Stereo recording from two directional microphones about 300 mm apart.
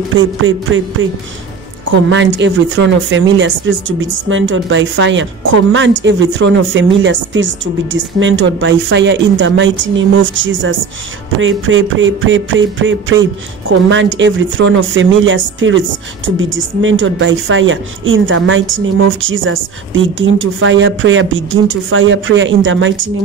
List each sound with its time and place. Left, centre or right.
0.1 s speech: right
1.9 s speech: right